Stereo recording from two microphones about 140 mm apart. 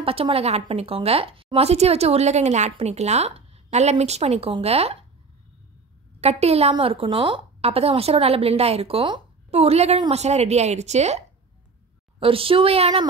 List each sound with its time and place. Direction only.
0.0 s a woman's voice: 45° right (ahead or behind)
6.2 s a woman's voice: 50° right (ahead or behind)
12.2 s a woman's voice: 40° right (ahead or behind)